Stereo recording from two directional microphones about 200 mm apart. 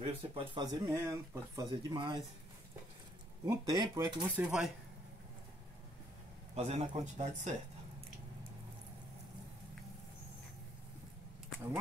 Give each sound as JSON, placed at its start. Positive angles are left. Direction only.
{"t": 0.0, "sound": "speech", "side_deg": -25}
{"t": 3.4, "sound": "speech", "side_deg": -20}
{"t": 4.4, "sound": "speech", "side_deg": -5}
{"t": 6.5, "sound": "speech", "side_deg": -30}